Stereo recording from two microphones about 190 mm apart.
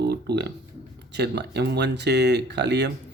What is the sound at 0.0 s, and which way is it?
Speech, 60° right (ahead or behind).